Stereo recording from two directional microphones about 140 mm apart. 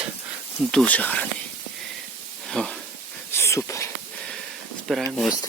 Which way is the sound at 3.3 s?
20° left (ahead or behind).